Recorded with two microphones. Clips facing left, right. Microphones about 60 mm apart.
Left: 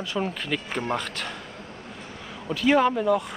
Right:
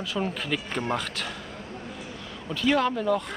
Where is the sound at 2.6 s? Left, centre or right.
Centre.